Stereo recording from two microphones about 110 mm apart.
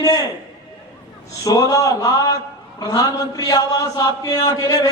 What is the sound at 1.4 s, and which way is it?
A man's voice, 30° left (ahead or behind).